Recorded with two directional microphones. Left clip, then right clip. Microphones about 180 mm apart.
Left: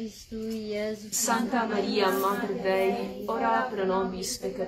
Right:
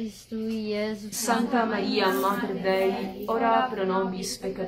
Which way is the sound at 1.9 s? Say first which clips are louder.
Right 1 dB; 20° right (ahead or behind).